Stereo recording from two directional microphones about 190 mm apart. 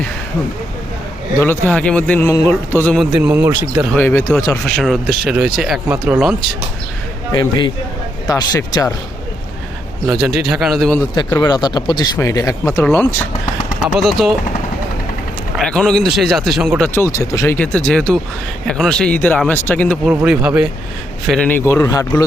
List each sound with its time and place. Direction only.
1.4 s a man's voice: 10° left (ahead or behind)
3.0 s speech: 5° right (ahead or behind)
3.9 s a man's voice: 10° left (ahead or behind)
4.6 s speech: centre (ahead or behind)
8.3 s speech: 20° left (ahead or behind)
10.1 s speech: 5° right (ahead or behind)
11.1 s speech: 20° left (ahead or behind)
13.8 s speech: centre (ahead or behind)
15.5 s speech: 5° left (ahead or behind)
16.9 s a man's voice: 15° left (ahead or behind)
20.1 s a man's voice: 5° right (ahead or behind); by 22.2 s 15° left (ahead or behind)